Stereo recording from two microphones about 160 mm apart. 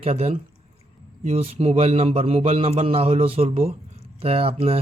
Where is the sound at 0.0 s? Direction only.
40° right (ahead or behind).